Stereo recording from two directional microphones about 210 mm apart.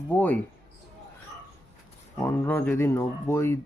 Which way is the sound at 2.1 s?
10° left (ahead or behind).